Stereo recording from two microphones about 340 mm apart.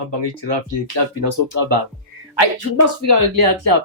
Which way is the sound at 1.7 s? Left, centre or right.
Right.